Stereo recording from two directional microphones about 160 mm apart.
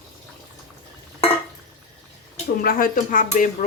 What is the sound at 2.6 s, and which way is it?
Speech, 65° left (ahead or behind).